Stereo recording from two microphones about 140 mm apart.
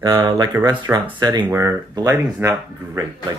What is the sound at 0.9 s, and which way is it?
Speech, 15° right (ahead or behind).